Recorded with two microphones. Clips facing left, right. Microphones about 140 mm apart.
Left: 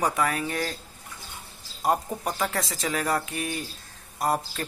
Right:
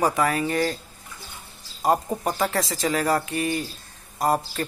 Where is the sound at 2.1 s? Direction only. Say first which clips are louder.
Right 4 dB; 20° right (ahead or behind).